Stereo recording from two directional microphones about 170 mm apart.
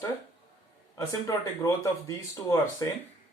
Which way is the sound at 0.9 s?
20° left (ahead or behind).